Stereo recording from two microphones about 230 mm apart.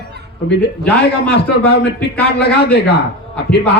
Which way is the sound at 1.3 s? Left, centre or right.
Left.